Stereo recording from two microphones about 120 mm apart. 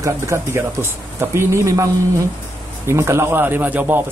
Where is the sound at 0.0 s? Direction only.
25° right (ahead or behind).